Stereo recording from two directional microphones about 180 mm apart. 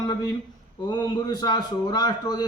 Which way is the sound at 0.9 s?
25° left (ahead or behind).